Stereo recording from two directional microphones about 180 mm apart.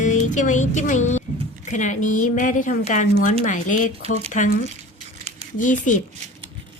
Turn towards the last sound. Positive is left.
turn(degrees=45)  # may be behind; listen again after turning